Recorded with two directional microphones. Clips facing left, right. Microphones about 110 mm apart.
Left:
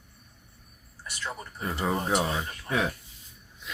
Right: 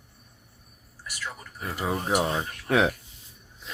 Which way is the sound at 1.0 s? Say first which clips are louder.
Left 1 dB; 30° left (ahead or behind).